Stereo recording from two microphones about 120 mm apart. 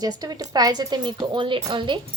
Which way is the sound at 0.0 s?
35° right (ahead or behind).